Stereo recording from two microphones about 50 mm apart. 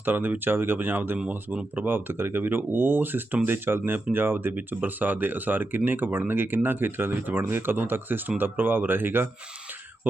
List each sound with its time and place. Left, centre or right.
0.0 s speech: right
1.5 s speech: right
1.9 s speech: right